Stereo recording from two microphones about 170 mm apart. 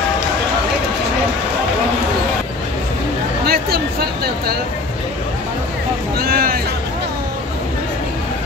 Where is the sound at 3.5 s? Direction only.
65° right (ahead or behind).